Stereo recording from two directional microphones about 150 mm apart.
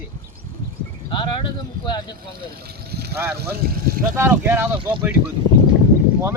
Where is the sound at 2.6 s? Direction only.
90° right.